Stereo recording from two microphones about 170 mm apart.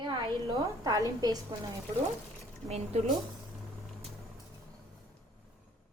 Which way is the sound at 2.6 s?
40° right (ahead or behind).